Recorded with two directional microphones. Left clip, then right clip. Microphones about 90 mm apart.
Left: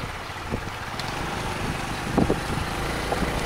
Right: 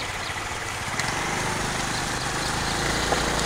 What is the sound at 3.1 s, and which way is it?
Vehicle, 15° left (ahead or behind).